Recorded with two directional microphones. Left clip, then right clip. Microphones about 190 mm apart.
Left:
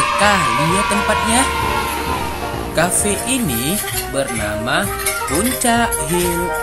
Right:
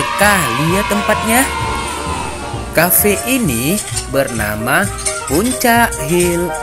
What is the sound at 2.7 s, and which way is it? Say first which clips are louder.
Speech: right 4 dB; 35° right (ahead or behind).